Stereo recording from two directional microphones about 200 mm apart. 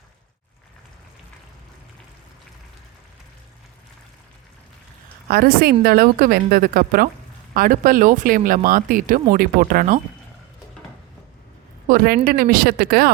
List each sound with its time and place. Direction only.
5.3 s speech: 50° right (ahead or behind)
11.9 s speech: 45° right (ahead or behind)